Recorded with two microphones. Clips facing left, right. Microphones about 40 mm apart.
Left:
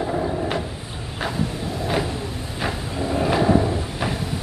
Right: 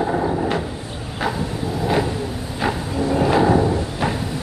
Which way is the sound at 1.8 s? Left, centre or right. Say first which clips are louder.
Right 4 dB; centre.